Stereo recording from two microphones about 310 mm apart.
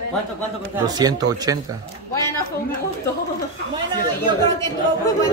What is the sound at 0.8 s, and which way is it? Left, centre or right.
Speech, centre.